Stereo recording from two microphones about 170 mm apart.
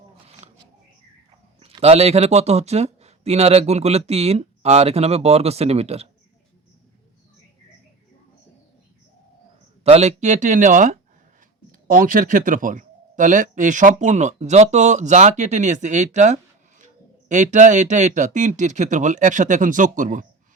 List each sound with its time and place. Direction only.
1.5 s speech: 35° right (ahead or behind)
9.8 s speech: 40° right (ahead or behind)